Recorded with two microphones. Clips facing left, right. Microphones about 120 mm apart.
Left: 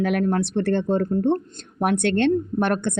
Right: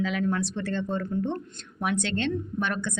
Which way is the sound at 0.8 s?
45° left (ahead or behind).